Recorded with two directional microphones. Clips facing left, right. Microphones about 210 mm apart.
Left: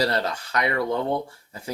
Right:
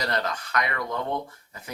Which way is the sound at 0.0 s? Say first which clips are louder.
Left 4 dB; 30° left (ahead or behind).